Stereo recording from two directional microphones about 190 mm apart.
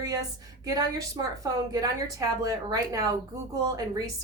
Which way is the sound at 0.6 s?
20° right (ahead or behind).